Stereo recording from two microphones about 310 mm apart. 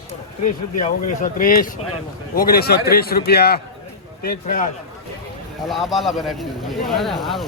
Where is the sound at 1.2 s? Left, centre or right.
Left.